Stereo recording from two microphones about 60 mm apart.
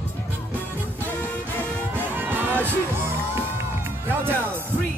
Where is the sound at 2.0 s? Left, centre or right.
Right.